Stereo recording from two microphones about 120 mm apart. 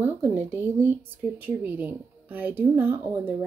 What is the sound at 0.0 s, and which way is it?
Speech, 15° right (ahead or behind).